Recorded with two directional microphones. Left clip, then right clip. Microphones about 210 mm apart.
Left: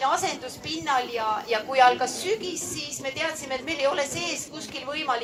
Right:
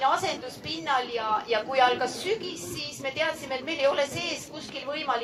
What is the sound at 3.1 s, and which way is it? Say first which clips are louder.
A woman's voice: right 1 dB; 20° left (ahead or behind).